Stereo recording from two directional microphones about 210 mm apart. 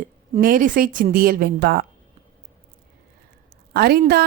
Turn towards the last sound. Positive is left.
turn(degrees=-50)  # may be behind; listen again after turning